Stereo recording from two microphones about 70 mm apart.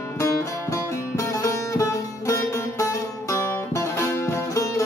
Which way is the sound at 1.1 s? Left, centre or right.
Left.